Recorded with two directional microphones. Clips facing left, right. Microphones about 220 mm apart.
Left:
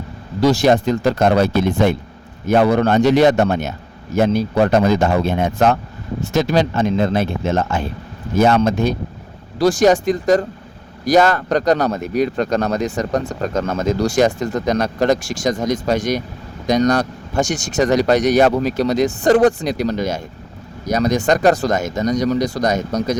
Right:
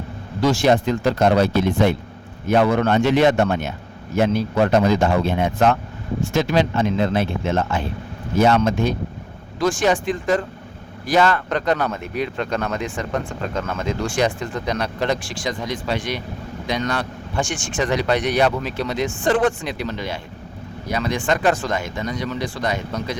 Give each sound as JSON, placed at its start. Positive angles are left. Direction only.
{"t": 0.4, "sound": "speech", "side_deg": 40}